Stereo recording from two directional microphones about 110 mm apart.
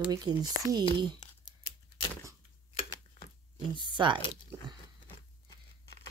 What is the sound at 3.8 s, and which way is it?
Speech, 45° right (ahead or behind).